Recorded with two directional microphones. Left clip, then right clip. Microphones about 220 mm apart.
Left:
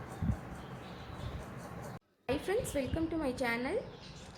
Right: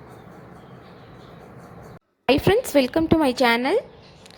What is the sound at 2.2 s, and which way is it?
A woman's voice, 35° right (ahead or behind).